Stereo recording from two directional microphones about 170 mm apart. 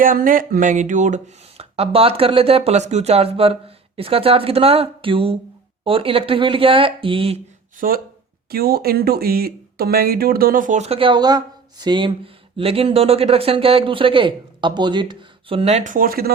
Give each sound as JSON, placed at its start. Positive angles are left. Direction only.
{"t": 0.0, "sound": "speech", "side_deg": -55}
{"t": 7.8, "sound": "speech", "side_deg": -55}